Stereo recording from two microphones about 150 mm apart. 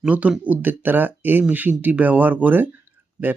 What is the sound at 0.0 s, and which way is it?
Speech, 10° right (ahead or behind).